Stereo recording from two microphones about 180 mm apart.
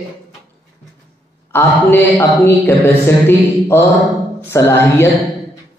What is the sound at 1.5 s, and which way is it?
Speech, 10° left (ahead or behind).